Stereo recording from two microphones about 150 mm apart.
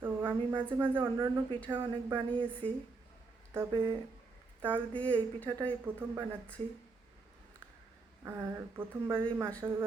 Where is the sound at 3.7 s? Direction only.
30° right (ahead or behind).